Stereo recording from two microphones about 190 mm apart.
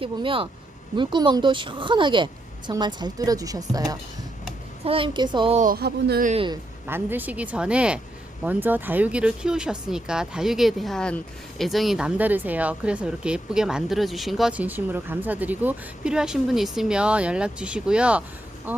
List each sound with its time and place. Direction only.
0.0 s a woman's voice: 30° right (ahead or behind)
5.5 s speech: 50° right (ahead or behind)
6.2 s a woman's voice: 30° right (ahead or behind)
6.8 s a woman's voice: 10° right (ahead or behind)